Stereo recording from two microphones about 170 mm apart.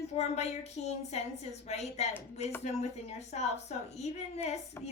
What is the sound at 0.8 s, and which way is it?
A woman's voice, 40° left (ahead or behind).